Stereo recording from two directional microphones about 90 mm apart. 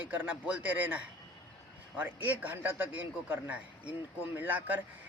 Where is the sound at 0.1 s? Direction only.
15° right (ahead or behind).